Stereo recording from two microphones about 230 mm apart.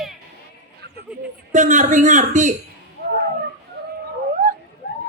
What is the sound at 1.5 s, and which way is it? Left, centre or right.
Speech, right.